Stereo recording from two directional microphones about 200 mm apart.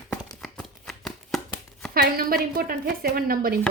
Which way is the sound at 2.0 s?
50° right (ahead or behind).